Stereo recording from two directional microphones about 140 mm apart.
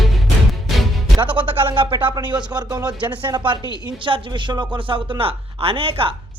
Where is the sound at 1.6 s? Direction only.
35° right (ahead or behind).